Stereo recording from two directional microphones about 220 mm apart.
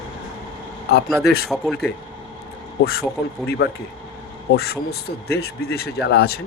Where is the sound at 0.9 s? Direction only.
45° left (ahead or behind).